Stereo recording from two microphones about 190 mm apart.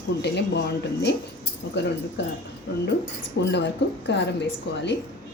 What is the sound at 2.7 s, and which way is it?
A woman's voice, 55° left (ahead or behind).